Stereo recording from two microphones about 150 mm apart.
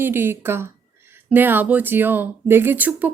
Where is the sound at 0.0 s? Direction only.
15° right (ahead or behind).